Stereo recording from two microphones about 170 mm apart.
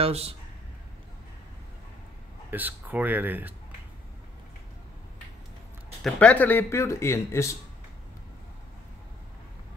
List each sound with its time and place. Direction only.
0.0 s speech: 35° right (ahead or behind)
2.5 s speech: 10° right (ahead or behind)
6.0 s speech: 10° left (ahead or behind)